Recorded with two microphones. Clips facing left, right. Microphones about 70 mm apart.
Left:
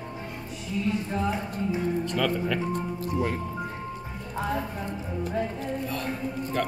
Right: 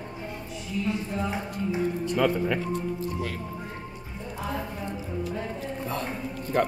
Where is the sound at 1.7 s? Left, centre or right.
Centre.